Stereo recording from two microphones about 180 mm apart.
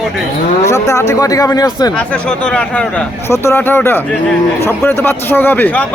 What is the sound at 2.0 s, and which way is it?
A man's voice, 5° left (ahead or behind).